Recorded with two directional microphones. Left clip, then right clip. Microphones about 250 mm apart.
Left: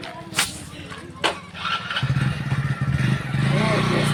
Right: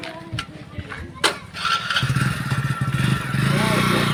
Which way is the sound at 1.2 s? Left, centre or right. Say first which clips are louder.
Right 3 dB; right.